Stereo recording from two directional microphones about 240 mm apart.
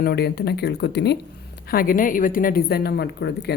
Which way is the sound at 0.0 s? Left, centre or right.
Left.